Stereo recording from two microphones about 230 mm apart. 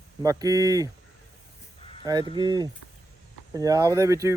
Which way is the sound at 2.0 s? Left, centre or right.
Centre.